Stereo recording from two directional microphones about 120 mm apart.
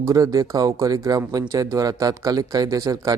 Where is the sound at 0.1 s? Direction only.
30° right (ahead or behind).